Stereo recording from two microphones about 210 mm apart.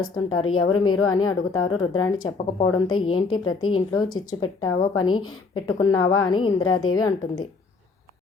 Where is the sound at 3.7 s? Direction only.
20° left (ahead or behind).